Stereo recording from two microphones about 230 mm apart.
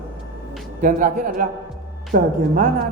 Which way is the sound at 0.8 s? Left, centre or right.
Right.